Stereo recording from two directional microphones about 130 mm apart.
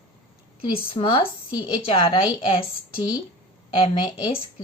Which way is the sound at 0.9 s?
45° left (ahead or behind).